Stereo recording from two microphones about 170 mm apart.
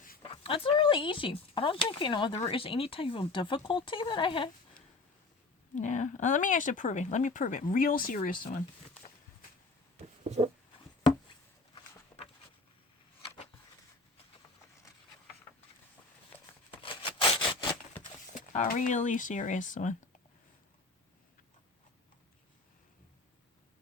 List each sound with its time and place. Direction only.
0.2 s speech: 30° left (ahead or behind)
5.7 s speech: 45° left (ahead or behind)
10.2 s a sound: 40° right (ahead or behind)
11.7 s a sound: 35° left (ahead or behind)
16.8 s wood: 30° left (ahead or behind)
18.3 s speech: 50° left (ahead or behind)